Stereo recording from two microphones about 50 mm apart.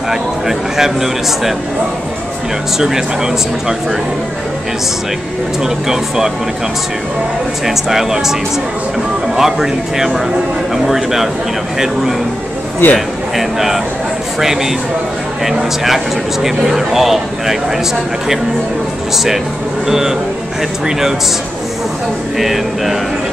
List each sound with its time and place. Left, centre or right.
0.1 s speech: centre
5.6 s speech: centre
7.6 s speech: centre
9.4 s speech: centre
12.8 s speech: left
13.4 s speech: centre
19.1 s speech: centre
22.4 s speech: centre